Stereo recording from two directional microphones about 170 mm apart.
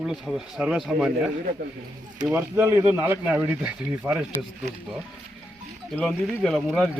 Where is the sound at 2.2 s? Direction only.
15° right (ahead or behind).